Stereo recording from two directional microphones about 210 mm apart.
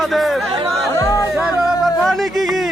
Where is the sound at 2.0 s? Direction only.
Centre (ahead or behind).